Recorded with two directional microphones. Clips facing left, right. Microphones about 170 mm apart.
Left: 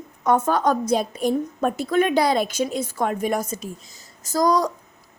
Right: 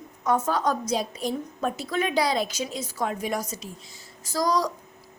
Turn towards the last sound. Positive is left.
turn(degrees=50)  # may be behind; listen again after turning